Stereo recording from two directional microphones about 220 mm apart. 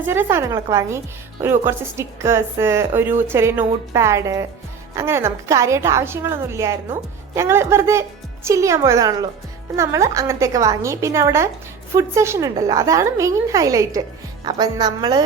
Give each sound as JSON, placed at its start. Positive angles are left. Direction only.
{"t": 0.0, "sound": "a woman's voice", "side_deg": -10}